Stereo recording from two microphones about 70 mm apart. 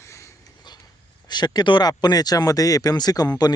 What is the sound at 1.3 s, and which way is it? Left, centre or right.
Speech, left.